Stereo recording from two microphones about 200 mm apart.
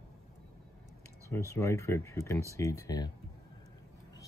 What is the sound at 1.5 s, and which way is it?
Speech, 15° left (ahead or behind).